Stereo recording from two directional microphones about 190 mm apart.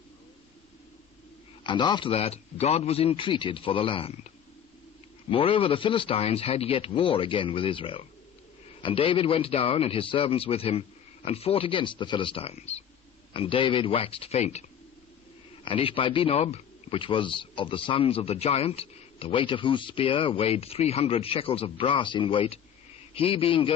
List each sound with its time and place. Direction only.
1.6 s speech: 25° left (ahead or behind)
5.3 s speech: 30° left (ahead or behind)
15.6 s speech: 30° left (ahead or behind)